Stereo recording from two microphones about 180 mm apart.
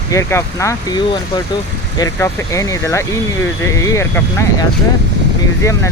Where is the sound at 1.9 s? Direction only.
20° left (ahead or behind).